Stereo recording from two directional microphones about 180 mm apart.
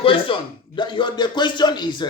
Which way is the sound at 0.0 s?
30° left (ahead or behind).